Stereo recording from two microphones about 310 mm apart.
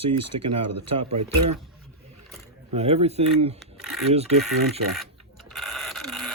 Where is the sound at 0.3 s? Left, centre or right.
Centre.